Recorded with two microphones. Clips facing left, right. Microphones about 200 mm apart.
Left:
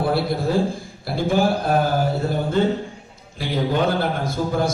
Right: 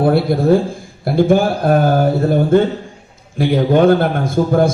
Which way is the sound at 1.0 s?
50° right (ahead or behind).